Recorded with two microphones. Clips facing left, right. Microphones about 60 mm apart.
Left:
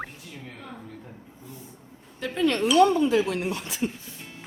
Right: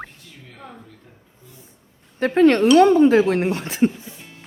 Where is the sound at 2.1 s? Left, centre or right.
Right.